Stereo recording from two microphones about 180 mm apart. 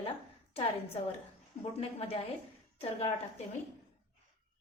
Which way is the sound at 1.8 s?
35° left (ahead or behind).